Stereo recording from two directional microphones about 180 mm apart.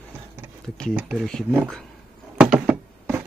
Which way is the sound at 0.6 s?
5° left (ahead or behind).